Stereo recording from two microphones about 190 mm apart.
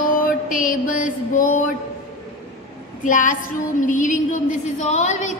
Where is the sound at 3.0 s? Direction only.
45° left (ahead or behind).